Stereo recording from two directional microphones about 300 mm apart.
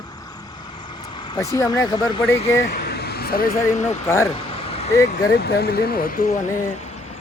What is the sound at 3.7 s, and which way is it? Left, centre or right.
Speech, left.